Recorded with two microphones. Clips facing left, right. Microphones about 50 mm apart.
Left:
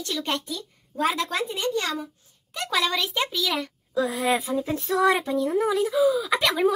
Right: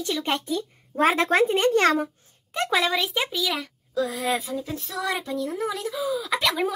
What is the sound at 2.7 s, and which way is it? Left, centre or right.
A child's voice, centre.